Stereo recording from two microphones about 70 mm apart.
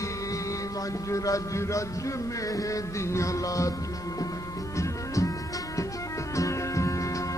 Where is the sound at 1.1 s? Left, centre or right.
Left.